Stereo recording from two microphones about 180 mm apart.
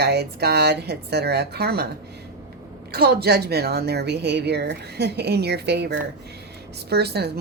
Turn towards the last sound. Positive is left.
turn(degrees=-65)  # may be behind; listen again after turning